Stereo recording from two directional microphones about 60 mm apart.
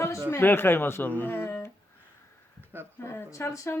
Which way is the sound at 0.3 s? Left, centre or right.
Left.